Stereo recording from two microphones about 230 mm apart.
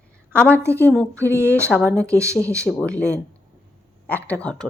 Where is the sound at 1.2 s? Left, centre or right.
Centre.